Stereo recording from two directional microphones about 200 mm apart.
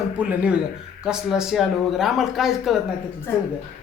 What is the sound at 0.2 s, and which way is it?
A man's voice, 5° right (ahead or behind).